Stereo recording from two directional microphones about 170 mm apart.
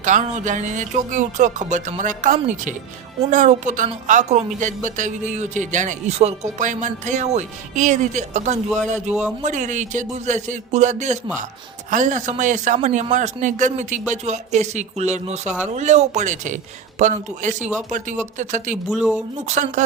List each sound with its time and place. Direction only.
0.0 s speech: 45° right (ahead or behind)
9.0 s speech: 5° right (ahead or behind)
9.4 s speech: 45° right (ahead or behind)
18.9 s speech: 5° right (ahead or behind)
19.5 s speech: 45° right (ahead or behind)